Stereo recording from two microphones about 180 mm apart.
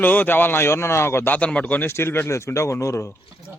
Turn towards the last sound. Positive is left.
turn(degrees=15)  # may be behind; listen again after turning